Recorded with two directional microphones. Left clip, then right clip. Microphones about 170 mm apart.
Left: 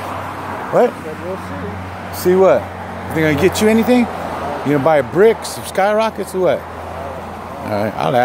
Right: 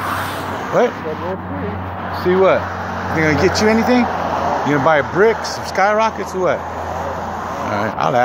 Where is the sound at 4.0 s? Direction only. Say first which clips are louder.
Right 3 dB; 15° left (ahead or behind).